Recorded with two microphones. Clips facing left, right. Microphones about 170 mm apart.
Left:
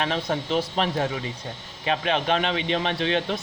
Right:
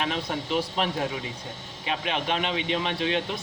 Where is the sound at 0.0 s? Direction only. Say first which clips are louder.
Left 3 dB; 40° left (ahead or behind).